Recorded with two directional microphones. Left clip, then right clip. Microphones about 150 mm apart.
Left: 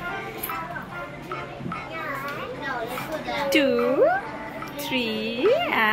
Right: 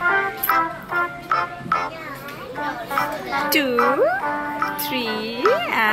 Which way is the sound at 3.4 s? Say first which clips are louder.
Right 1 dB; 10° right (ahead or behind).